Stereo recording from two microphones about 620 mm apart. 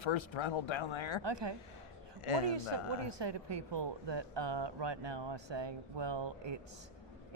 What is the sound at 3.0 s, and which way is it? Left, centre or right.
Speech, right.